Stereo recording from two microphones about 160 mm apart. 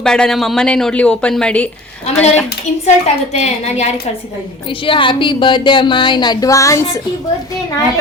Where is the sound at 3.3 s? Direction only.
45° left (ahead or behind).